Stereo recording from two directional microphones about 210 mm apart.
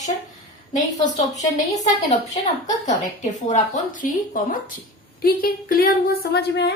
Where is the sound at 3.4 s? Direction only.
35° left (ahead or behind).